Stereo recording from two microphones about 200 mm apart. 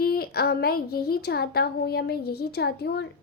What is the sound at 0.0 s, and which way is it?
Speech, 50° left (ahead or behind).